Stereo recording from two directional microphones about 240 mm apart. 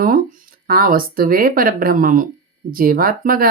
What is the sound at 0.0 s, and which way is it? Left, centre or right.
Speech, right.